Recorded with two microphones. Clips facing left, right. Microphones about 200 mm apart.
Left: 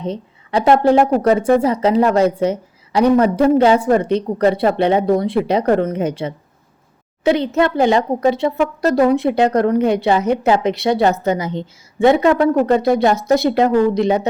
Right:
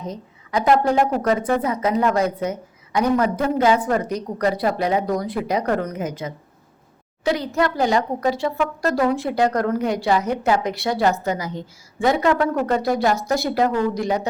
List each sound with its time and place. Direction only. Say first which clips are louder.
0.0 s a woman's voice: left 7 dB; 30° left (ahead or behind)